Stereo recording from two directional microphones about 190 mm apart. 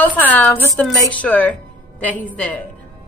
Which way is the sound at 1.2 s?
5° left (ahead or behind).